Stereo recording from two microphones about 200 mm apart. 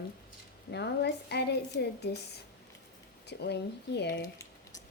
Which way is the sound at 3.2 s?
55° left (ahead or behind).